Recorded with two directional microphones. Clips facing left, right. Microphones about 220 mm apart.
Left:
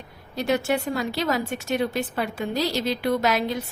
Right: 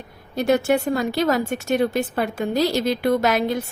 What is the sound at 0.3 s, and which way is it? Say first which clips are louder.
Speech: right 5 dB; 50° right (ahead or behind).